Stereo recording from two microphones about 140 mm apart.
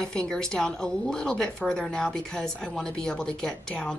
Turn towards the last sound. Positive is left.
turn(degrees=5)  # may be behind; listen again after turning